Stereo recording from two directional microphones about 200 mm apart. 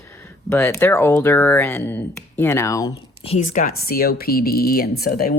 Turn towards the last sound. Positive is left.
turn(degrees=50)  # may be behind; listen again after turning